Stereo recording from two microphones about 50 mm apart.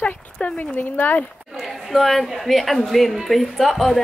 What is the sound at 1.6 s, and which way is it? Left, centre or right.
Speech, centre.